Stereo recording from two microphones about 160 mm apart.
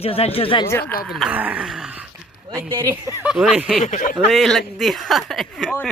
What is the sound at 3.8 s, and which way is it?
Speech, 50° left (ahead or behind).